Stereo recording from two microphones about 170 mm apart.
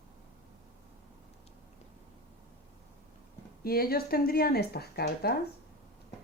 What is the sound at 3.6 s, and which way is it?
Speech, 60° left (ahead or behind).